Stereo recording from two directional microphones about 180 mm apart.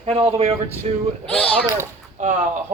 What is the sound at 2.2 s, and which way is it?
Speech, 40° right (ahead or behind).